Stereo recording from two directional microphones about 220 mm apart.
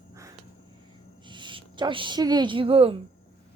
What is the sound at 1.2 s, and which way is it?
A woman's voice, 20° right (ahead or behind).